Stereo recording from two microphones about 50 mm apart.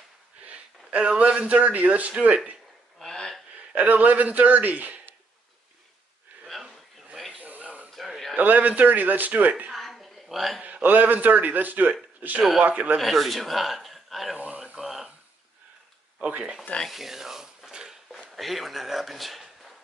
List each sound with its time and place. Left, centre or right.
0.4 s a man's voice: right
3.0 s a sound: centre
3.7 s a man's voice: right
7.3 s a sound: right
8.4 s a man's voice: right
9.7 s a sound: centre
10.6 s a man's voice: right
13.0 s speech: centre
14.3 s speech: right
14.6 s a sound: centre
16.2 s speech: right
16.8 s speech: centre
18.3 s a man's voice: centre